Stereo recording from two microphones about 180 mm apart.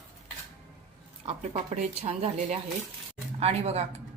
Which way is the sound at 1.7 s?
40° right (ahead or behind).